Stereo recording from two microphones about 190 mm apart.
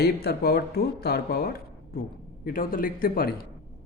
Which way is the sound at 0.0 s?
55° left (ahead or behind).